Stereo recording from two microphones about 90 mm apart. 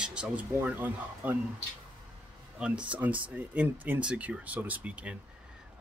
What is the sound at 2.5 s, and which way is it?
Speech, 10° right (ahead or behind).